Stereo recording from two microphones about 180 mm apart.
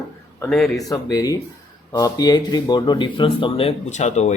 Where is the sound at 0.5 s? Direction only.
Centre (ahead or behind).